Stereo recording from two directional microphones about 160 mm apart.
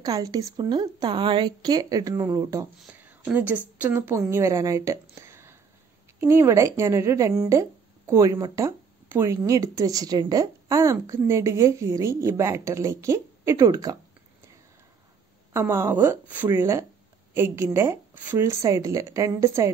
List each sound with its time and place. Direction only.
0.0 s speech: 25° right (ahead or behind)
5.1 s a sound: 15° right (ahead or behind)
6.2 s speech: 15° right (ahead or behind)
15.5 s speech: 15° right (ahead or behind)